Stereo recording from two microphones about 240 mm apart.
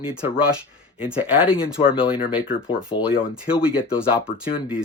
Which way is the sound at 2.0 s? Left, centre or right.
Left.